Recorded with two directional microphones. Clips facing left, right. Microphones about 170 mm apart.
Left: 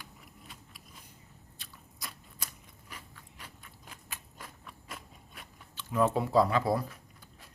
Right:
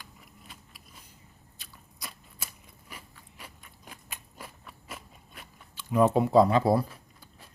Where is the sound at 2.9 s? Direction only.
10° right (ahead or behind); by 7.2 s 30° right (ahead or behind).